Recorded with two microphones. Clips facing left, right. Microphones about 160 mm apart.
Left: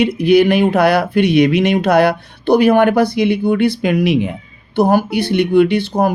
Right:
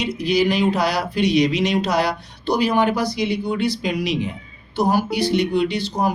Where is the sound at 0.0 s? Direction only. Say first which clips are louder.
Left 8 dB; 60° left (ahead or behind).